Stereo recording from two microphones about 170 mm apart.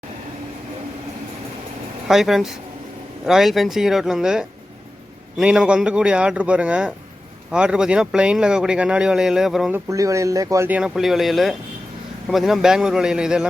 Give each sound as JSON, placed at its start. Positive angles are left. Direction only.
{"t": 2.0, "sound": "speech", "side_deg": 0}
{"t": 9.7, "sound": "speech", "side_deg": -20}
{"t": 10.8, "sound": "speech", "side_deg": -5}